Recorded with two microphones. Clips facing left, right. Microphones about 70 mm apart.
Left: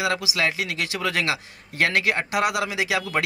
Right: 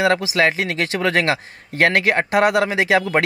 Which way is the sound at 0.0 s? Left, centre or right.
Right.